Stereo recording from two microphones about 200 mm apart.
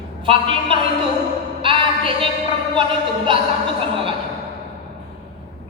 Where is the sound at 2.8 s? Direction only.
25° right (ahead or behind).